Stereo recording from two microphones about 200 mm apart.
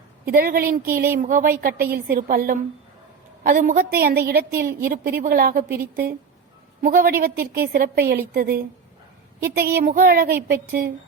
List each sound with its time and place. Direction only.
0.3 s a woman's voice: 45° right (ahead or behind)